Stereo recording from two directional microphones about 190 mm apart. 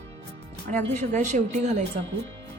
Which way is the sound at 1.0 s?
40° right (ahead or behind).